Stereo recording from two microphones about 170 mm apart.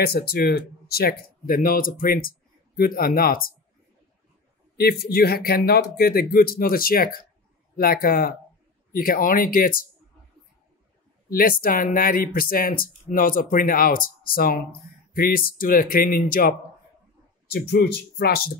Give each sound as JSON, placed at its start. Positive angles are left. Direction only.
{"t": 0.0, "sound": "speech", "side_deg": 65}
{"t": 4.7, "sound": "speech", "side_deg": 65}
{"t": 11.2, "sound": "speech", "side_deg": 55}
{"t": 17.5, "sound": "speech", "side_deg": 75}